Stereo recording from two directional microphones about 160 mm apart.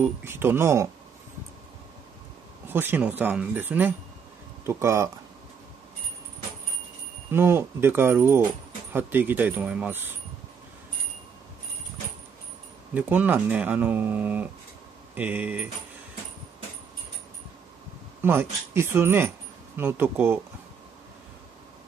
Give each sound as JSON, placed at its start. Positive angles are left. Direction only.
{"t": 0.0, "sound": "speech", "side_deg": -15}
{"t": 2.7, "sound": "speech", "side_deg": -15}
{"t": 7.2, "sound": "speech", "side_deg": -15}
{"t": 12.9, "sound": "speech", "side_deg": -10}
{"t": 18.2, "sound": "speech", "side_deg": -15}